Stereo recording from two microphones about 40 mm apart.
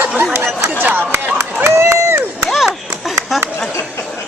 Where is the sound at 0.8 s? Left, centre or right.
Right.